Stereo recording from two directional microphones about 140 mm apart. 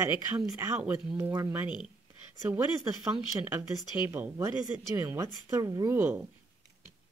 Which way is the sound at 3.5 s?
15° right (ahead or behind).